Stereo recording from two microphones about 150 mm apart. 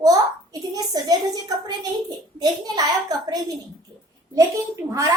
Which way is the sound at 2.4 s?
25° right (ahead or behind).